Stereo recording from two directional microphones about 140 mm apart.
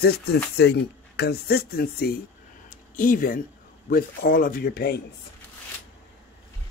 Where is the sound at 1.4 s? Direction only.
90° left.